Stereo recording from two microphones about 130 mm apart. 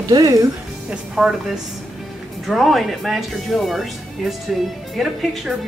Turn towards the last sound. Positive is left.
turn(degrees=0)  # may be behind; listen again after turning